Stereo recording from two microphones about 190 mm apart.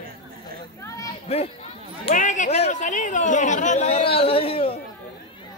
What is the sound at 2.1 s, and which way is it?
Speech, 40° left (ahead or behind).